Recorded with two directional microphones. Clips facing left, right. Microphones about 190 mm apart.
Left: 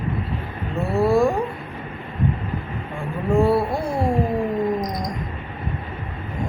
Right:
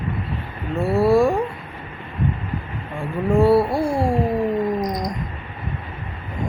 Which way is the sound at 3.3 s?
5° right (ahead or behind).